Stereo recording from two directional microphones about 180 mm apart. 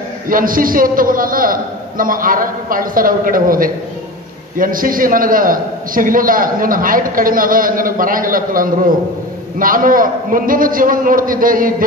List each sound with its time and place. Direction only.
0.3 s a man's voice: 50° right (ahead or behind)